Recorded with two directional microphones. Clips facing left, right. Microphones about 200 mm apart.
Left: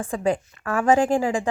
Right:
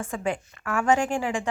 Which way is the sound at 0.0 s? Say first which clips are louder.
Left 5 dB; 35° left (ahead or behind).